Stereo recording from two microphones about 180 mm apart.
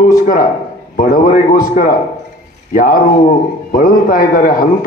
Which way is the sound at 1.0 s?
50° left (ahead or behind).